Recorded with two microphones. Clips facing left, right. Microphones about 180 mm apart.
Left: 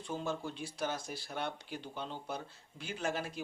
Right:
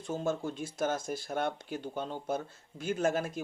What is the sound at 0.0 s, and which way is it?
Speech, 45° right (ahead or behind).